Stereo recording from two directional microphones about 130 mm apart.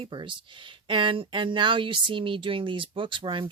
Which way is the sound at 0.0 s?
40° right (ahead or behind).